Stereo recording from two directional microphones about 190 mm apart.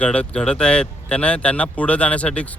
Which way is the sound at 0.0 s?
5° left (ahead or behind).